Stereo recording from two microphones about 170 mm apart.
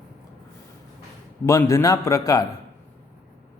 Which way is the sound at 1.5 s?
20° left (ahead or behind).